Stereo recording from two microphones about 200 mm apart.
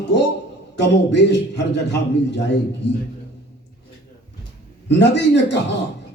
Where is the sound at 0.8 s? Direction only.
60° left (ahead or behind).